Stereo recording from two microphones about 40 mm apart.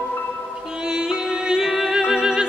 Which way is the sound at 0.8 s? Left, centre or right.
Centre.